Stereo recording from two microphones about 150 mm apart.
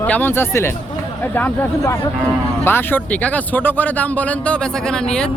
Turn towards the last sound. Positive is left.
turn(degrees=5)  # may be behind; listen again after turning